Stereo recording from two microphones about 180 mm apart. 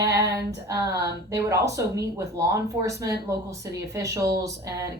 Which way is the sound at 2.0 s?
15° right (ahead or behind).